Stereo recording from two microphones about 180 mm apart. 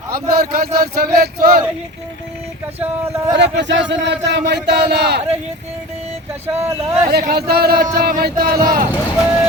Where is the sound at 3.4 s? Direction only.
75° right (ahead or behind).